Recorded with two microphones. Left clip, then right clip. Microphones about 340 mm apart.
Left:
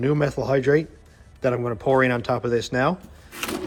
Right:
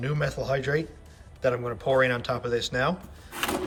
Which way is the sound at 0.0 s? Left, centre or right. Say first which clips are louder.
Left 7 dB; centre.